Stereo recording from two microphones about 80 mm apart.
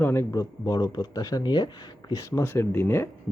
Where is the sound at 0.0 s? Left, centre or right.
Left.